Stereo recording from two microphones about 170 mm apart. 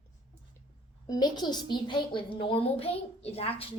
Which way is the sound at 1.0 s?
25° left (ahead or behind).